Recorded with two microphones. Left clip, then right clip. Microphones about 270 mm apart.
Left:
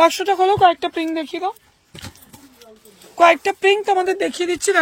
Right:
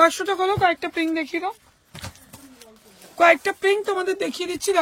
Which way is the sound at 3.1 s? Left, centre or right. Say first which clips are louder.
Left 3 dB; centre.